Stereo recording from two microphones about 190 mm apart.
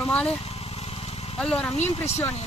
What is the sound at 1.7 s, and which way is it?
Speech, 35° left (ahead or behind).